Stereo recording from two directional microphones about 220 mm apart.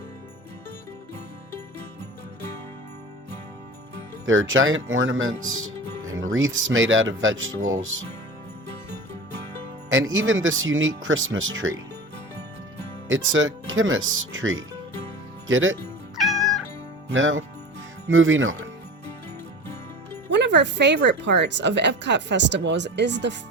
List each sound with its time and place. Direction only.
4.3 s speech: 65° right (ahead or behind)
9.9 s speech: 60° right (ahead or behind)
13.1 s speech: 65° right (ahead or behind)
16.1 s cat: centre (ahead or behind)
17.1 s speech: 60° right (ahead or behind)
20.3 s speech: 50° right (ahead or behind)